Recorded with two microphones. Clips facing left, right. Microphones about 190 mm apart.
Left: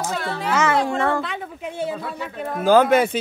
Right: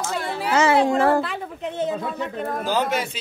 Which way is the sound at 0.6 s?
30° right (ahead or behind).